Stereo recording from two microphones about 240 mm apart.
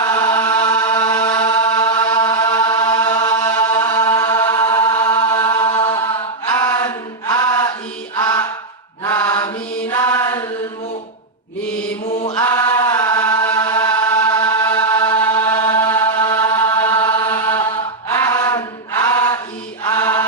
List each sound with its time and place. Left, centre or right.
0.0 s chant: centre
8.1 s mantra: centre
9.9 s a sound: centre
12.4 s chant: centre
19.8 s chant: centre